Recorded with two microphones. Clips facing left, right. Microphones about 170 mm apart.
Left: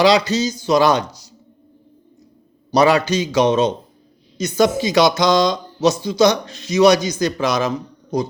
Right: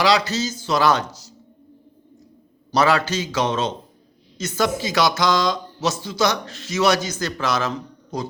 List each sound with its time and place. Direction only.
0.0 s speech: 20° left (ahead or behind)
2.7 s speech: 15° left (ahead or behind)